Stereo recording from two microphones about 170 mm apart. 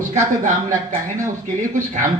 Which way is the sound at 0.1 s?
45° right (ahead or behind).